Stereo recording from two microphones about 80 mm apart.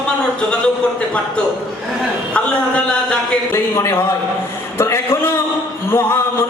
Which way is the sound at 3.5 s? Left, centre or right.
Left.